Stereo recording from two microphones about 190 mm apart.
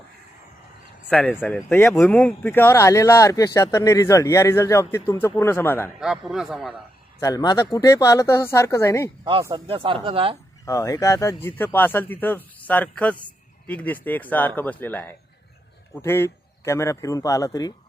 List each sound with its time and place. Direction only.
1.1 s speech: 5° left (ahead or behind)
6.0 s speech: 5° right (ahead or behind)
7.2 s speech: 20° left (ahead or behind)
9.6 s speech: 30° right (ahead or behind)
10.7 s speech: 15° left (ahead or behind)